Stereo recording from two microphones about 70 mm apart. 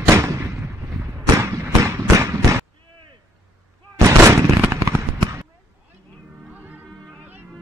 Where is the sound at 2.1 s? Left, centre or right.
Right.